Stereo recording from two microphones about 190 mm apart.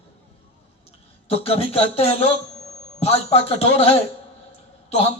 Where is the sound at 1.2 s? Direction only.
30° left (ahead or behind).